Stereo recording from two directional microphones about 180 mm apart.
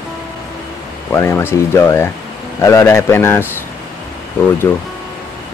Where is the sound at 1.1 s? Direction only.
15° left (ahead or behind).